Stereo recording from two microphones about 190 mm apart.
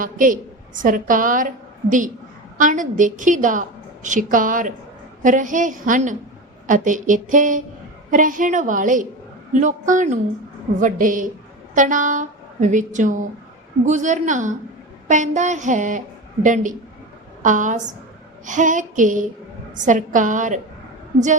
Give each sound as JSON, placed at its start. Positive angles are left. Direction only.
{"t": 0.0, "sound": "a woman's voice", "side_deg": -45}